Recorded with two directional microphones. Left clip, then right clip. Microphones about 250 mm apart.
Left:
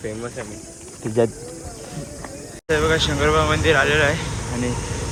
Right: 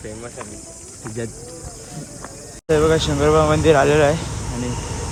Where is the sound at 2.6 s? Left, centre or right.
Right.